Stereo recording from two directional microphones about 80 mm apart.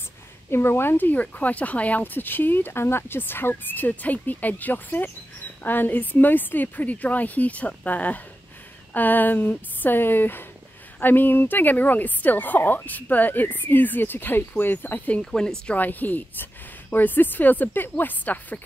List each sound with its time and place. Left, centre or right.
0.5 s speech: left
15.1 s a woman's voice: centre
15.6 s speech: centre